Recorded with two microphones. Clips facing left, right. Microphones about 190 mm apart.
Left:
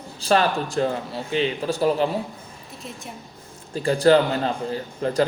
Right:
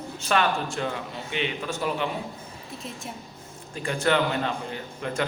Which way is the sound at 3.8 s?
35° left (ahead or behind).